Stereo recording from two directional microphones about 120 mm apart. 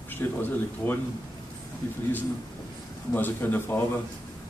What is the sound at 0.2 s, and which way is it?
Speech, 15° left (ahead or behind).